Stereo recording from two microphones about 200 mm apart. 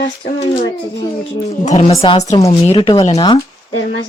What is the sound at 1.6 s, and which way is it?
Speech, 30° left (ahead or behind).